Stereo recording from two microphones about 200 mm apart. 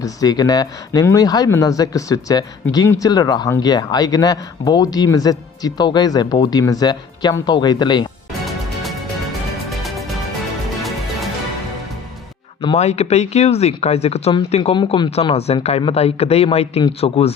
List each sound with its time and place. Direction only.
0.0 s speech: 20° left (ahead or behind)
8.4 s music: centre (ahead or behind)
12.6 s speech: 35° left (ahead or behind)